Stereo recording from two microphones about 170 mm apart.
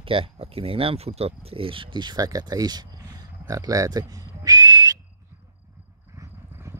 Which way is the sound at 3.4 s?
20° right (ahead or behind).